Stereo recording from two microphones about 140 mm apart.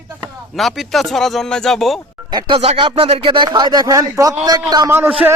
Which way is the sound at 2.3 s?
30° right (ahead or behind).